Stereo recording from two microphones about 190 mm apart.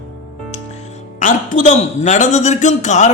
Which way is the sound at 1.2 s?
40° left (ahead or behind).